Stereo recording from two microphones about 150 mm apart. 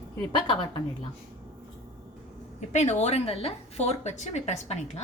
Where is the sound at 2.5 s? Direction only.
50° left (ahead or behind).